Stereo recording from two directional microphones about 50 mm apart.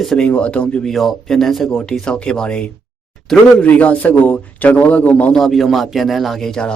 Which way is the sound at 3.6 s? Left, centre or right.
Left.